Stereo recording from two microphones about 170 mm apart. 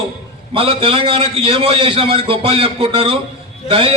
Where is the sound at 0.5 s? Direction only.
30° right (ahead or behind).